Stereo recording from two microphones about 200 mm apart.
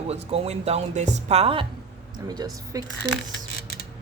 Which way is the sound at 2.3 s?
20° right (ahead or behind).